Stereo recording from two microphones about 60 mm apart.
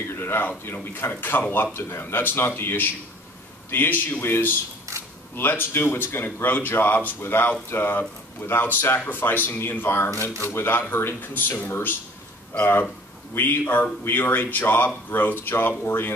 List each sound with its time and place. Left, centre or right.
0.1 s speech: left